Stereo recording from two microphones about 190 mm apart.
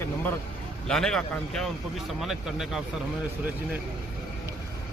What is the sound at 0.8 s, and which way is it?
A man's voice, 5° left (ahead or behind).